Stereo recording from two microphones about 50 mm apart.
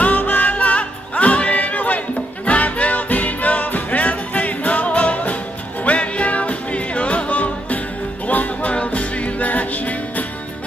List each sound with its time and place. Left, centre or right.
0.0 s music: left